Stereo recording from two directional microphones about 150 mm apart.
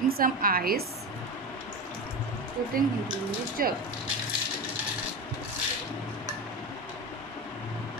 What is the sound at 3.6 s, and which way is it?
Speech, 75° right (ahead or behind).